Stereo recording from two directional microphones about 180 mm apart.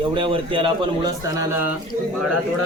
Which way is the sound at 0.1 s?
30° right (ahead or behind).